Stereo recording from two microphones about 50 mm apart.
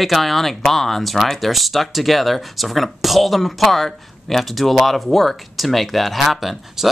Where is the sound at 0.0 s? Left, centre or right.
Centre.